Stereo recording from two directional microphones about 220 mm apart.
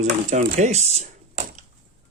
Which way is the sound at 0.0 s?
30° right (ahead or behind).